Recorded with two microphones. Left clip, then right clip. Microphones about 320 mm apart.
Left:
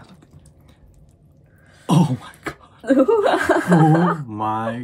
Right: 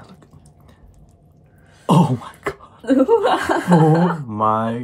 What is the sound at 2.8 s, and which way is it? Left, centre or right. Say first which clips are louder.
Speech: right 1 dB; centre.